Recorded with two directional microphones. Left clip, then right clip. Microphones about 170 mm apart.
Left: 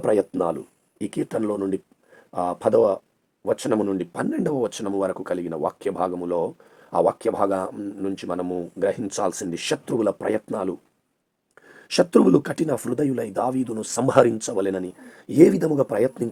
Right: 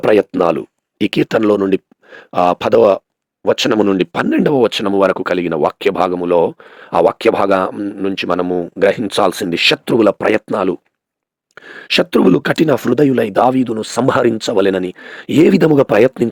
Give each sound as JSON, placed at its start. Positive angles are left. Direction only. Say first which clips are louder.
{"t": 0.0, "sound": "speech", "louder": "right 9 dB", "side_deg": -30}